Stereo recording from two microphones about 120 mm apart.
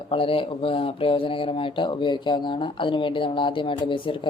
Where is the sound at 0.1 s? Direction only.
50° left (ahead or behind).